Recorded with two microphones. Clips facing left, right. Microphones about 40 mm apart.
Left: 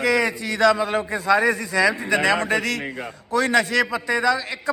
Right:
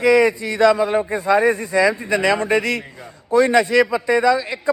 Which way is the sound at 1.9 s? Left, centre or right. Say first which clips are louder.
Right 1 dB; left.